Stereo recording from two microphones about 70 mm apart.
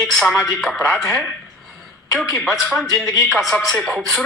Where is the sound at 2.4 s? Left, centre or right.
Centre.